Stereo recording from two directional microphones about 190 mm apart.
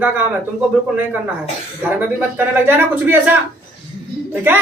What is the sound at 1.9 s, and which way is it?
Speech, 10° right (ahead or behind).